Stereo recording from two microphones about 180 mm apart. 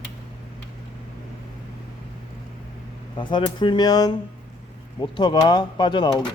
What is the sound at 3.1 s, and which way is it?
Speech, 25° left (ahead or behind).